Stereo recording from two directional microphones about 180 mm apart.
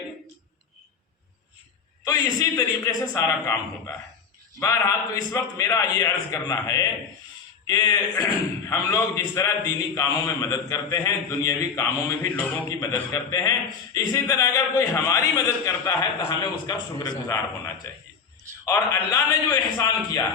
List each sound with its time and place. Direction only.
2.0 s a man's voice: 20° left (ahead or behind)
18.6 s speech: 20° left (ahead or behind)